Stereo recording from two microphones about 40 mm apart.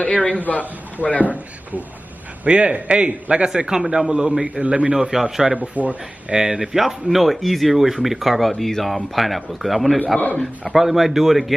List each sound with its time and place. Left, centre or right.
0.0 s a man's voice: left
1.2 s a man's voice: right
2.4 s a man's voice: right
5.1 s speech: centre
5.5 s a man's voice: right
6.3 s speech: centre